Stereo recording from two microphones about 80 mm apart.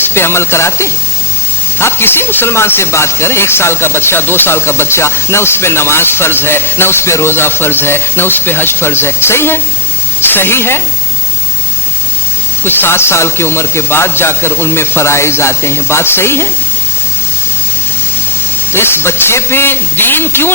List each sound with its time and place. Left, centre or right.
0.0 s a woman's voice: left
12.6 s speech: left
18.7 s speech: left